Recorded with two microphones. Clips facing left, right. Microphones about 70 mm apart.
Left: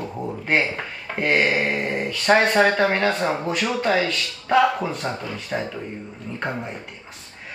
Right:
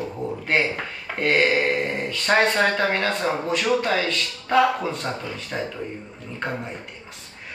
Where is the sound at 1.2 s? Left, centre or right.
Centre.